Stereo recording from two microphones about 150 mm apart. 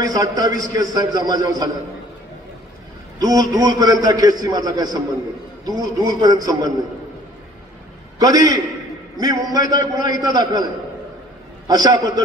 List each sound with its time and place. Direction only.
0.0 s a man's voice: 25° right (ahead or behind)
3.2 s a man's voice: 25° right (ahead or behind)
8.2 s a man's voice: 25° right (ahead or behind)